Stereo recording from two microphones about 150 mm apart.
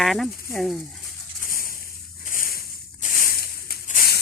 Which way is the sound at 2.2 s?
65° left (ahead or behind).